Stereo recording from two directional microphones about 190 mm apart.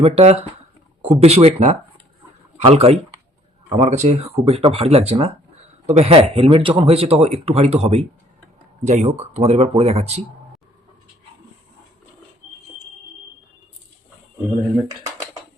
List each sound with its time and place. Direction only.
0.0 s speech: 35° right (ahead or behind)